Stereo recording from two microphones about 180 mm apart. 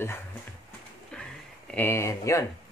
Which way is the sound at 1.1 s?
5° left (ahead or behind).